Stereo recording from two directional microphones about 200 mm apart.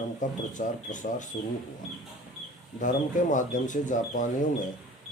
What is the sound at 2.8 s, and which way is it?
Speech, 40° left (ahead or behind).